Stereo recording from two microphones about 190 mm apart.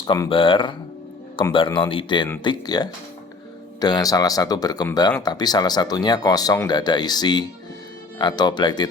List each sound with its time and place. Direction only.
0.0 s speech: 25° left (ahead or behind)